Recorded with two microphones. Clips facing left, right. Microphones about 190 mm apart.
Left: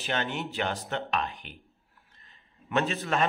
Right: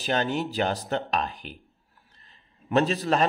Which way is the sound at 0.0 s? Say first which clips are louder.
Right 5 dB; 35° right (ahead or behind).